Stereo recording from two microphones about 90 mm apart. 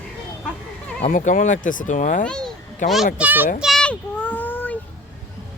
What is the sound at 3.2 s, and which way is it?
Speech, 20° right (ahead or behind).